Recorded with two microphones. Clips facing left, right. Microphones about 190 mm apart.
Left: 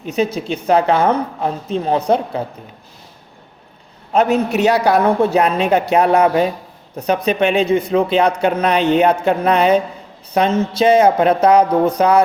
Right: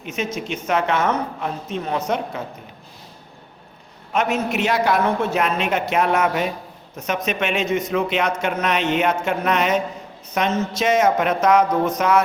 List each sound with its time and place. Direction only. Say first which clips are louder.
0.0 s speech: left 7 dB; 35° left (ahead or behind)
4.1 s speech: left 6 dB; 35° left (ahead or behind)